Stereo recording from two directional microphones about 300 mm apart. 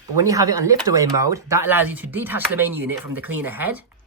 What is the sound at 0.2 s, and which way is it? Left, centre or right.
Speech, centre.